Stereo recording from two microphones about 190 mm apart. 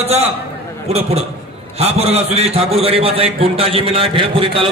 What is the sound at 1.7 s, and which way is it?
A man's voice, 35° right (ahead or behind).